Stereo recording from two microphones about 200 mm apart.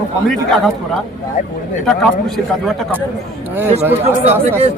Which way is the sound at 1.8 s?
Centre (ahead or behind).